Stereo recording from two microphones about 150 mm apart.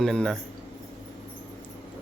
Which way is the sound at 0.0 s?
5° left (ahead or behind).